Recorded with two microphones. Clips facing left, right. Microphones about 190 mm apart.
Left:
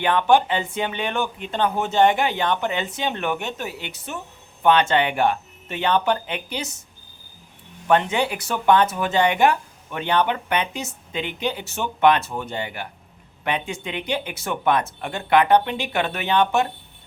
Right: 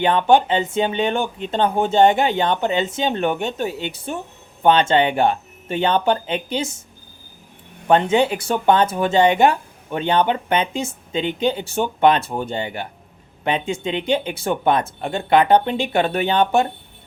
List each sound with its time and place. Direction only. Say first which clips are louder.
0.0 s speech: right 3 dB; 25° right (ahead or behind)
7.9 s speech: right 4 dB; 25° right (ahead or behind)